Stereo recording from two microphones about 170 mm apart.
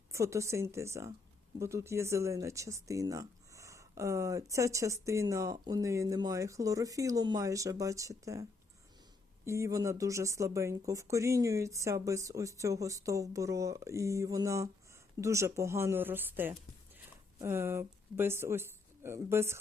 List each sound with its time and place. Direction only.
0.1 s speech: 15° right (ahead or behind)